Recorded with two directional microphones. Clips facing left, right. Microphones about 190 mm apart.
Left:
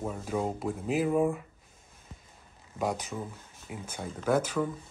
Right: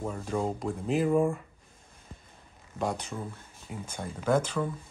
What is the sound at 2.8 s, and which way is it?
Speech, 5° left (ahead or behind).